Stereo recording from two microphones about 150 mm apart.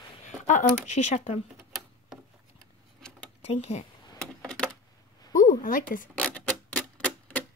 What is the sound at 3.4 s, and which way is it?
Speech, 45° left (ahead or behind).